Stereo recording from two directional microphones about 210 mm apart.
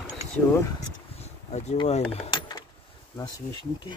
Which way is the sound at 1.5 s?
30° left (ahead or behind).